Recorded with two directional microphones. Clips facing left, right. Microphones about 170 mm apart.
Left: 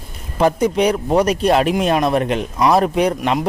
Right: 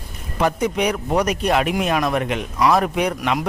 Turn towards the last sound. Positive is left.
turn(degrees=30)  # may be behind; listen again after turning